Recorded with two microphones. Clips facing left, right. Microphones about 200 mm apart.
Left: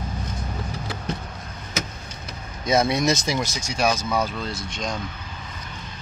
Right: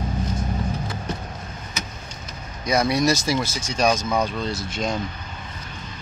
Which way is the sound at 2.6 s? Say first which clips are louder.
Even; 25° left (ahead or behind).